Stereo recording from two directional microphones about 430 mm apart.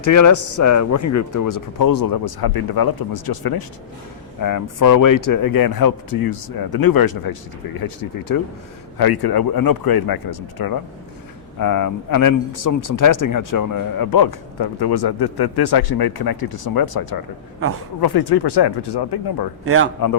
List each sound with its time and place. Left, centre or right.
0.0 s speech: left
19.6 s a man's voice: right